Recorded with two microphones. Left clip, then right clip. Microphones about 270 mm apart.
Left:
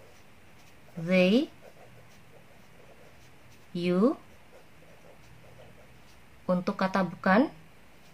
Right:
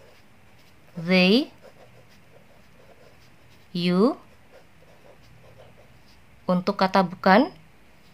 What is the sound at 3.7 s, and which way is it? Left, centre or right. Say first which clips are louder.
Speech: right 4 dB; right.